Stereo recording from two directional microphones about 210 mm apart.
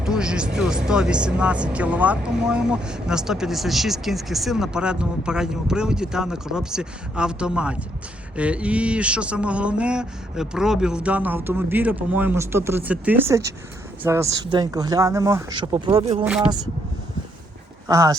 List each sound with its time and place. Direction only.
0.0 s speech: 5° right (ahead or behind); by 16.2 s 25° right (ahead or behind)
16.2 s speech: 5° right (ahead or behind)
17.8 s speech: 15° right (ahead or behind)